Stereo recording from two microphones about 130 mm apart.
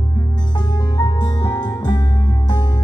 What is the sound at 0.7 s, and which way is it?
Music, 30° left (ahead or behind).